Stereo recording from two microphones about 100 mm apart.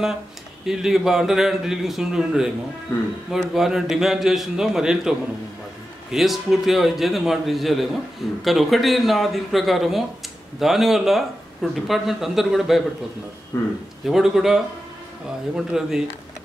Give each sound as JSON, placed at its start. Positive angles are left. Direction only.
{"t": 0.7, "sound": "a man's voice", "side_deg": -5}
{"t": 3.5, "sound": "a man's voice", "side_deg": -5}
{"t": 6.1, "sound": "a man's voice", "side_deg": -5}
{"t": 13.5, "sound": "speech", "side_deg": 30}
{"t": 14.0, "sound": "a man's voice", "side_deg": -5}